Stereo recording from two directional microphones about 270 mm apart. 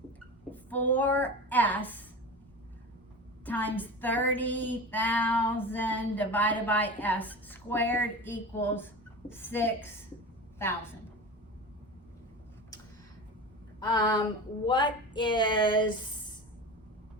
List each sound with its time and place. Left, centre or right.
0.5 s a woman's voice: centre
3.4 s female singing: centre
13.7 s female singing: centre